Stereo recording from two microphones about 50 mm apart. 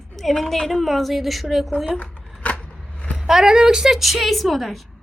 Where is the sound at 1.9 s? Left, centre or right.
Left.